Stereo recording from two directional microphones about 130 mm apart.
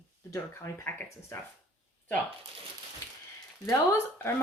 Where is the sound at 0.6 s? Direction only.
20° left (ahead or behind).